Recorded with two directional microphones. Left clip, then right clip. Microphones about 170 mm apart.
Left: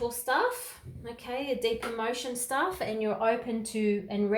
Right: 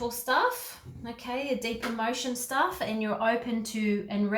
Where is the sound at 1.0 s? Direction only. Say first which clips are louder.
Right 1 dB; 50° left (ahead or behind).